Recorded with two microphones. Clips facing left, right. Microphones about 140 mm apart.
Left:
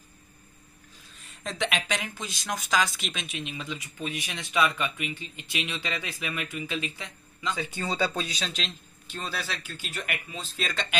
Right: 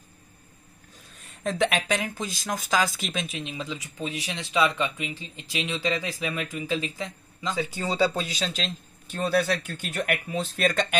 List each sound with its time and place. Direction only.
1.4 s speech: 40° right (ahead or behind)
9.1 s speech: 55° right (ahead or behind)